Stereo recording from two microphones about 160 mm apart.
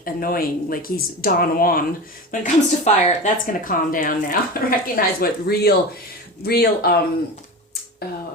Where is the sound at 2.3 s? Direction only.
50° left (ahead or behind); by 6.9 s 75° left (ahead or behind).